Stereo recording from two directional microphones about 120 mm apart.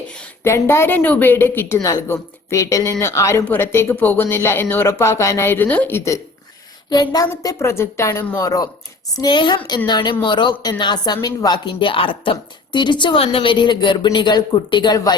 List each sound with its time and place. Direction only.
0.4 s speech: 20° left (ahead or behind)
6.9 s a woman's voice: 35° left (ahead or behind)